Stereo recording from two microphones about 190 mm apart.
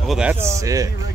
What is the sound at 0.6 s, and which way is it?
Speech, 15° right (ahead or behind).